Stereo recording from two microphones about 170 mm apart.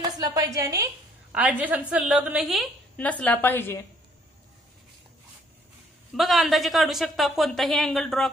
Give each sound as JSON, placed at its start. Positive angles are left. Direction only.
{"t": 0.0, "sound": "a woman's voice", "side_deg": -25}
{"t": 1.3, "sound": "a woman's voice", "side_deg": -10}
{"t": 6.1, "sound": "a woman's voice", "side_deg": 0}